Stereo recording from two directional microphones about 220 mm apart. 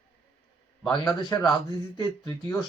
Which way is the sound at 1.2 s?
20° left (ahead or behind).